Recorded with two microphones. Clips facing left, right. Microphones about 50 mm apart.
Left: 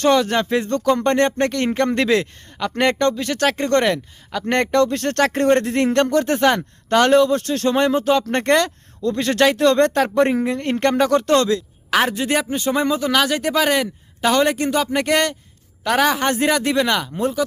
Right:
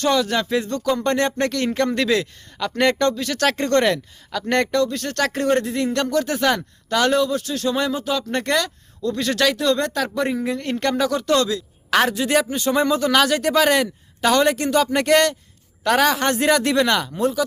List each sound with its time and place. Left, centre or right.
0.0 s speech: left
4.8 s speech: left
5.6 s speech: left
5.9 s speech: left
6.4 s speech: left
6.9 s speech: left
9.0 s speech: left
9.6 s speech: left
10.5 s a man's voice: left; by 14.4 s centre
14.4 s a man's voice: left
17.2 s speech: left